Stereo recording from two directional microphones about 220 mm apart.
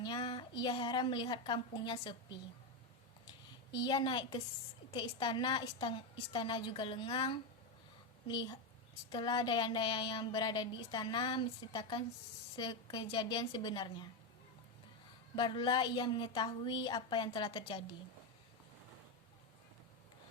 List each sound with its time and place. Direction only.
0.0 s a sound: 20° left (ahead or behind)
0.6 s child singing: 20° left (ahead or behind)
3.7 s child singing: 20° left (ahead or behind)
15.4 s child singing: 20° left (ahead or behind)